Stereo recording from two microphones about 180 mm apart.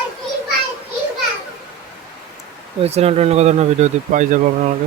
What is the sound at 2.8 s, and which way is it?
Speech, 35° right (ahead or behind).